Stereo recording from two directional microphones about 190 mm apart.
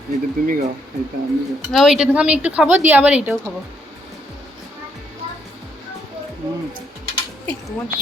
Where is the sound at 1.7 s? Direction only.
Centre (ahead or behind).